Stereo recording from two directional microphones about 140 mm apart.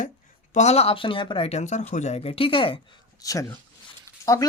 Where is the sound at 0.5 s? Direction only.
50° left (ahead or behind).